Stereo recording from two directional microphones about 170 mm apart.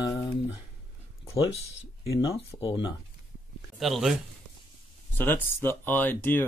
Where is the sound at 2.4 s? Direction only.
30° left (ahead or behind).